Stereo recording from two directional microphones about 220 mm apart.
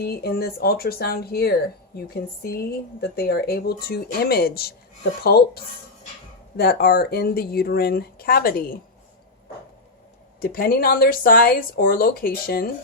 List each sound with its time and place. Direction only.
0.0 s speech: 45° left (ahead or behind)
10.4 s speech: 40° left (ahead or behind)